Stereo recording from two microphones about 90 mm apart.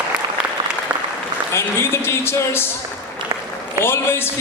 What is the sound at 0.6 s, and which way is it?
Applause, 55° right (ahead or behind).